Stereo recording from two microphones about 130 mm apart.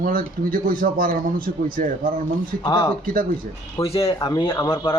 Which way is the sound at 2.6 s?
35° left (ahead or behind).